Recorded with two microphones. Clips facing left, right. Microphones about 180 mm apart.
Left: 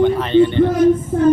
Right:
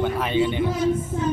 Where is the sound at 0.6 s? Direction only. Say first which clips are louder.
Left 9 dB; 55° left (ahead or behind).